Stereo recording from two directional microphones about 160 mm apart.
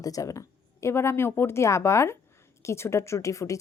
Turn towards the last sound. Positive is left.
turn(degrees=20)  # may be behind; listen again after turning